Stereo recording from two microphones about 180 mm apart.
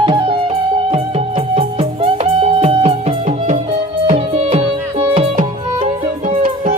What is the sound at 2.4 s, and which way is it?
Music, 35° right (ahead or behind).